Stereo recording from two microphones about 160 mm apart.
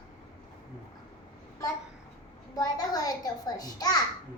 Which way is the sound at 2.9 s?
25° left (ahead or behind).